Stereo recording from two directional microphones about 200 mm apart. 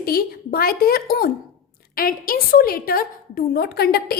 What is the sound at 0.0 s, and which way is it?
A woman's voice, 50° left (ahead or behind).